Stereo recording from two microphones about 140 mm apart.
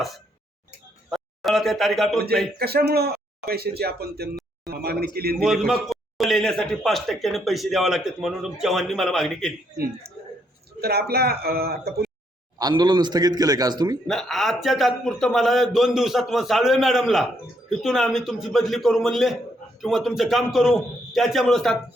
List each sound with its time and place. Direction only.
1.1 s speech: centre (ahead or behind)
2.6 s a man's voice: 90° right
5.4 s a man's voice: centre (ahead or behind)
10.8 s a man's voice: 90° right
12.5 s speech: 30° right (ahead or behind)
14.1 s a man's voice: centre (ahead or behind)